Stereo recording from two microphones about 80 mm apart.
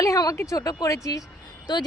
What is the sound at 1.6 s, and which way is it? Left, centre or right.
Speech, left.